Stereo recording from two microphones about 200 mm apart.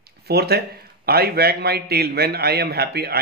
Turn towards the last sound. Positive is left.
turn(degrees=-50)  # may be behind; listen again after turning